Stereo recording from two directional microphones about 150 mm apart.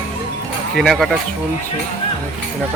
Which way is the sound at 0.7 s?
Centre (ahead or behind).